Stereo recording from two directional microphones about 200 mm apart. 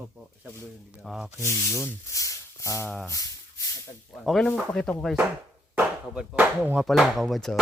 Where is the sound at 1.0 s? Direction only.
Centre (ahead or behind).